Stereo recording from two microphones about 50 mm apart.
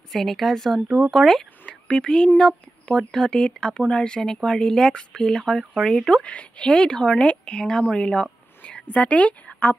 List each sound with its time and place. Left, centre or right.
0.1 s speech: centre
1.7 s speech: centre